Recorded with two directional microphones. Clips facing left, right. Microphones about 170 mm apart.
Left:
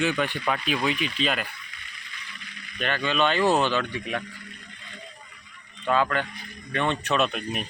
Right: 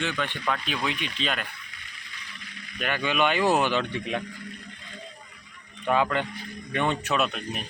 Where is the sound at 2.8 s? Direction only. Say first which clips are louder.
Left 1 dB; 10° right (ahead or behind).